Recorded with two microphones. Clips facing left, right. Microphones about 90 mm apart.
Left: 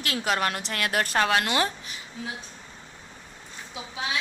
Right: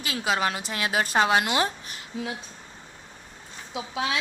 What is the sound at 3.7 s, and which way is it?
Speech, 90° right.